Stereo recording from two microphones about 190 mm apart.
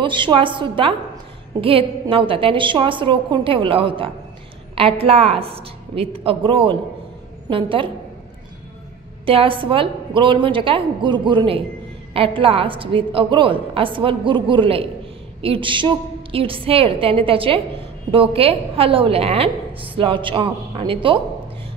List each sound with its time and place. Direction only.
0.0 s a woman's voice: 25° right (ahead or behind)
9.2 s a woman's voice: 30° right (ahead or behind)